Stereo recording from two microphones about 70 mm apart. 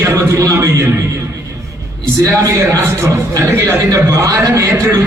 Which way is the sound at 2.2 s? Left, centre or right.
Right.